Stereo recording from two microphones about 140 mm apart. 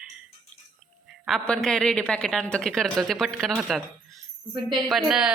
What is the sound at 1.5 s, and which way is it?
A woman's voice, 5° left (ahead or behind).